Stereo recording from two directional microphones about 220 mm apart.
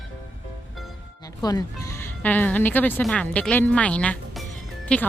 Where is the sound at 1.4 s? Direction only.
15° left (ahead or behind).